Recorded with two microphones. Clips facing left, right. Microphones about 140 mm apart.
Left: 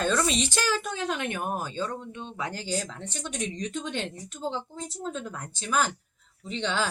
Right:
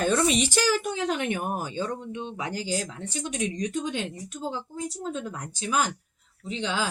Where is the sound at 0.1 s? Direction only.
20° right (ahead or behind).